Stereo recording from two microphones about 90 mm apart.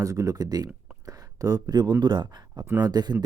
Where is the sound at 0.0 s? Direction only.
40° right (ahead or behind).